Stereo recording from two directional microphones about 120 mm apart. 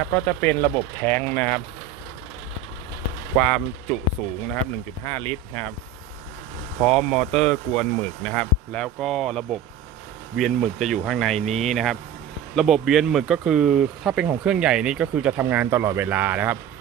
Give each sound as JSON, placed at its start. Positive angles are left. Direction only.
{"t": 0.0, "sound": "speech", "side_deg": 15}
{"t": 3.4, "sound": "speech", "side_deg": 5}
{"t": 5.0, "sound": "speech", "side_deg": 20}
{"t": 6.8, "sound": "speech", "side_deg": 5}